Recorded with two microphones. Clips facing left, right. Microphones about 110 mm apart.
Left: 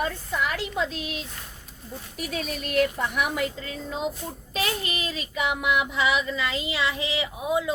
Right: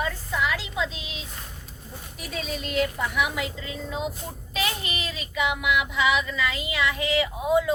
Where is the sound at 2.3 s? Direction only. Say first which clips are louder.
Left 2 dB; 55° left (ahead or behind).